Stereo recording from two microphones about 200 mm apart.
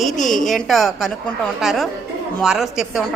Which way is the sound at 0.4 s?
Centre (ahead or behind).